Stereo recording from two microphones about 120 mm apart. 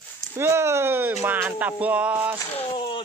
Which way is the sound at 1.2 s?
15° right (ahead or behind).